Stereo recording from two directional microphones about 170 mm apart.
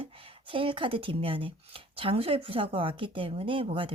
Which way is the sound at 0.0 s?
30° right (ahead or behind).